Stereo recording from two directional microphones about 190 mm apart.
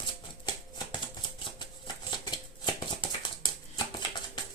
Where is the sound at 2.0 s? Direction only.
25° left (ahead or behind).